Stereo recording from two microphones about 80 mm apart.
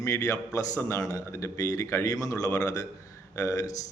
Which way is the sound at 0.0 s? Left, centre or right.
Left.